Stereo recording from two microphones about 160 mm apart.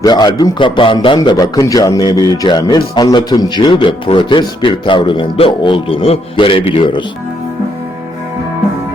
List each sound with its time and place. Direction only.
0.0 s a man's voice: 25° left (ahead or behind)